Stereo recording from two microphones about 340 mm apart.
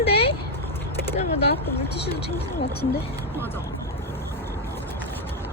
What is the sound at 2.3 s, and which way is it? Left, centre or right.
Speech, centre.